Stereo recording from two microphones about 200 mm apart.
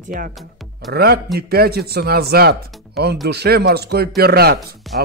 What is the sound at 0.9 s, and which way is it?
Speech, 50° right (ahead or behind).